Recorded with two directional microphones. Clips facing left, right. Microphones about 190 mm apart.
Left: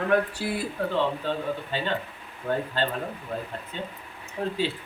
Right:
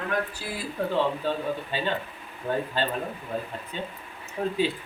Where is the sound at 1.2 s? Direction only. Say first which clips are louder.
Right 1 dB; 10° right (ahead or behind).